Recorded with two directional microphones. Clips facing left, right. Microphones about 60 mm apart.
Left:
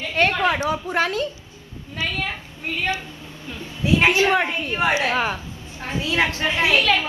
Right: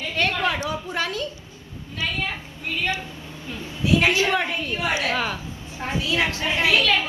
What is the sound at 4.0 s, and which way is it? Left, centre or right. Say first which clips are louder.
A woman's voice: left 3 dB; left.